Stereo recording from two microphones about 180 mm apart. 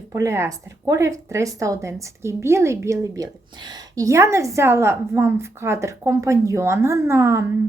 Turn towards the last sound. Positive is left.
turn(degrees=-15)  # may be behind; listen again after turning